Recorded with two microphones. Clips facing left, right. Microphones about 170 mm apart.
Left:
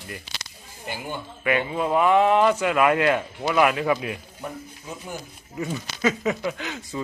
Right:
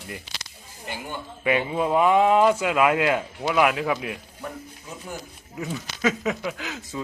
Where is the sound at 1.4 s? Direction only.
20° right (ahead or behind); by 4.1 s centre (ahead or behind).